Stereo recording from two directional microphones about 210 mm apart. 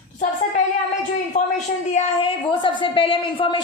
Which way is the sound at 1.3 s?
35° left (ahead or behind).